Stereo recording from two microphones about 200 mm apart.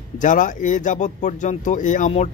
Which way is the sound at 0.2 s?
40° left (ahead or behind).